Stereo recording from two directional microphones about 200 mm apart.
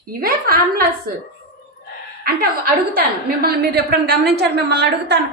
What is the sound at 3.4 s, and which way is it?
A woman's voice, 50° right (ahead or behind).